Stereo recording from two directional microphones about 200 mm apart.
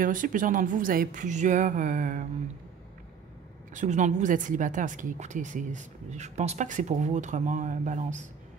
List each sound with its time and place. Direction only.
0.0 s a woman's voice: 40° right (ahead or behind)
3.7 s a woman's voice: 35° right (ahead or behind)